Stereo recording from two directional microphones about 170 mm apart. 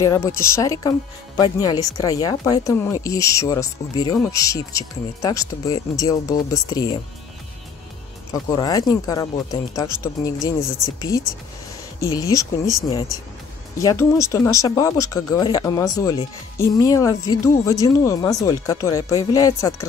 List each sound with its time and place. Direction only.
0.0 s speech: 15° left (ahead or behind)
8.3 s speech: 20° left (ahead or behind)
13.7 s speech: 20° left (ahead or behind)